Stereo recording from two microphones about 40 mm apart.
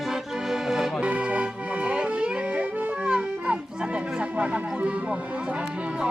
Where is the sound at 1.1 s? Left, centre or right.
Right.